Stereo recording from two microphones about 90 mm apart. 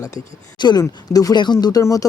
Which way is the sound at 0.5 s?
55° left (ahead or behind).